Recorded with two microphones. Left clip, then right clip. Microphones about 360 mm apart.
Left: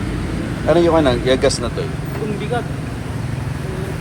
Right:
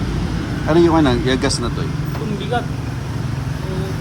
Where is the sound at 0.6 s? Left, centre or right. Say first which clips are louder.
Left 1 dB; centre.